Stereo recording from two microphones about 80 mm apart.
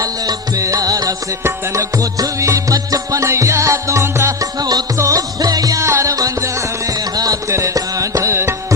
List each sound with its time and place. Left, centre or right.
0.0 s music: right
1.5 s music: right
4.4 s music: right
4.9 s music: right
5.8 s music: right